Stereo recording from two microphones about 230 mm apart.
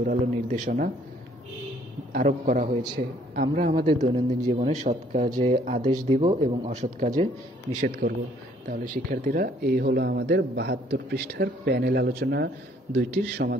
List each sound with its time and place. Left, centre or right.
0.0 s speech: right
2.1 s speech: right